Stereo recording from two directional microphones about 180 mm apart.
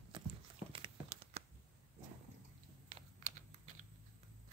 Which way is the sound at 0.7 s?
30° right (ahead or behind).